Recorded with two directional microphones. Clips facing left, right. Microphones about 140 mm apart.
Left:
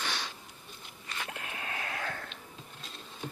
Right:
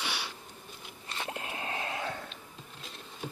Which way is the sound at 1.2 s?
25° right (ahead or behind).